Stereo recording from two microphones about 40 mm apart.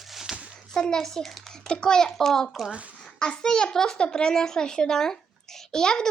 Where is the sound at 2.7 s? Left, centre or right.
Right.